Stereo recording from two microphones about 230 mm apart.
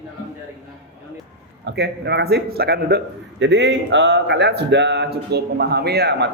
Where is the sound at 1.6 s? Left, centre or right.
Right.